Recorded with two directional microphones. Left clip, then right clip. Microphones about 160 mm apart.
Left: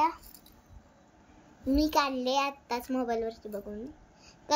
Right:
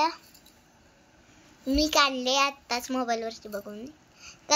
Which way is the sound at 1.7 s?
Centre (ahead or behind).